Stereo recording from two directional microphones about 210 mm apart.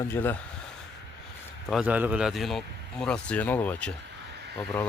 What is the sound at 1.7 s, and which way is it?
A man's voice, 5° right (ahead or behind).